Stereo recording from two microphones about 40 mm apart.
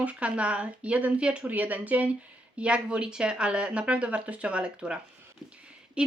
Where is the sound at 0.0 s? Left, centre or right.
Right.